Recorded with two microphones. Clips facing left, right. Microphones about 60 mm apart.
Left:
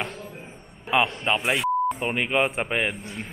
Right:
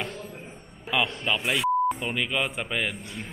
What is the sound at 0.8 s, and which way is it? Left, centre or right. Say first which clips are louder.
Speech: left 4 dB; left.